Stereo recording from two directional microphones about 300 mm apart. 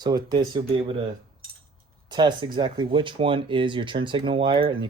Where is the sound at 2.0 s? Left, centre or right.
Centre.